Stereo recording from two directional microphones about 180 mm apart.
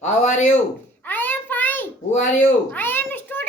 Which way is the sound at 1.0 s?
10° left (ahead or behind).